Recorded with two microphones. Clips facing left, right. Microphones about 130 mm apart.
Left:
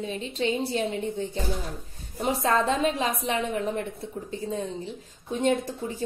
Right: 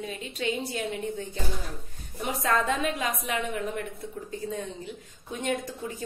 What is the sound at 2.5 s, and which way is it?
A woman's voice, 25° left (ahead or behind).